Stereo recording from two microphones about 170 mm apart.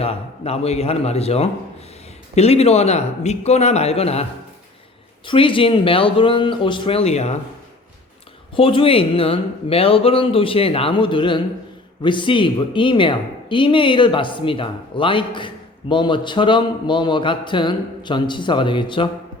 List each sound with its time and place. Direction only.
0.0 s speech: 35° left (ahead or behind)
8.5 s speech: 30° left (ahead or behind)